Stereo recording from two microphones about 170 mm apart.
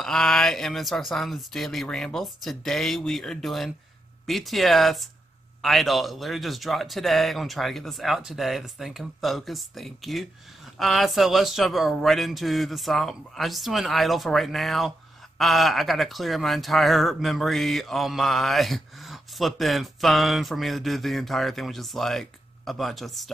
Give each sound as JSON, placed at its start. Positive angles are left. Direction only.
{"t": 0.0, "sound": "speech", "side_deg": 0}